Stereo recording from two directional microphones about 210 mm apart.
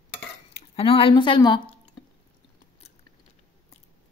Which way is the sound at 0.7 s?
25° left (ahead or behind).